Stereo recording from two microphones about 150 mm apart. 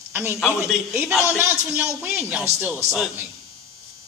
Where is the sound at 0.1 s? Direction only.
15° right (ahead or behind).